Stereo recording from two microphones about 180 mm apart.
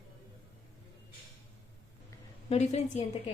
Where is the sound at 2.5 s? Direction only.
35° left (ahead or behind).